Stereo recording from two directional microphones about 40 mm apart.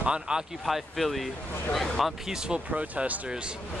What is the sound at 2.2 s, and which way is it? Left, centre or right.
Speech, centre.